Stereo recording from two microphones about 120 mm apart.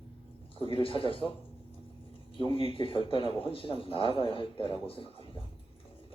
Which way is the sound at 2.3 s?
45° left (ahead or behind).